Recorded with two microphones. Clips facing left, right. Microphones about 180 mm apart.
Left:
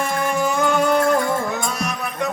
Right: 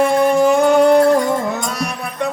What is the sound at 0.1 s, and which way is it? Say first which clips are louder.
Music: right 8 dB; 35° right (ahead or behind).